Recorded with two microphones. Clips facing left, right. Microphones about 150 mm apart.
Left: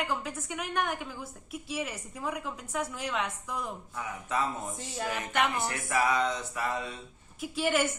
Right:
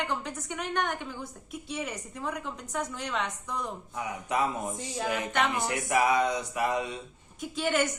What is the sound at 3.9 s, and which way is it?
A man's voice, 15° right (ahead or behind).